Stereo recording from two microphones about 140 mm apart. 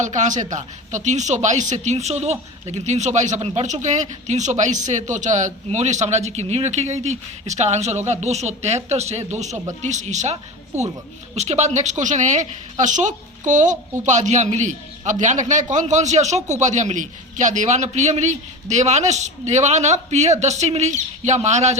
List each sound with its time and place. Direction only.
0.0 s a man's voice: 60° right (ahead or behind)
11.3 s a man's voice: 55° right (ahead or behind)